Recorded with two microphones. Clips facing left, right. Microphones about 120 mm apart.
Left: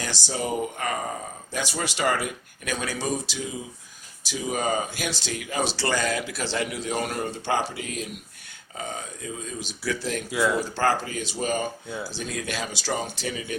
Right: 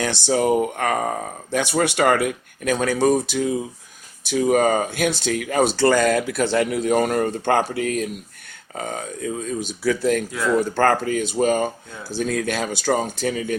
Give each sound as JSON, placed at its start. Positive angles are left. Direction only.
{"t": 0.0, "sound": "speech", "side_deg": -60}